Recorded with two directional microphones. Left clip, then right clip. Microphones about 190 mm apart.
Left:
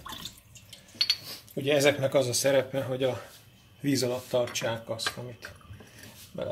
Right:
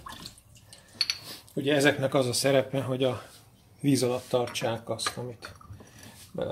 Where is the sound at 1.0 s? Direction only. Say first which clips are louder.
Left 2 dB; 30° right (ahead or behind).